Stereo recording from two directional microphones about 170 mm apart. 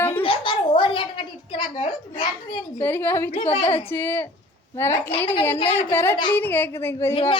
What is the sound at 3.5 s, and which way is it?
Speech, 30° left (ahead or behind).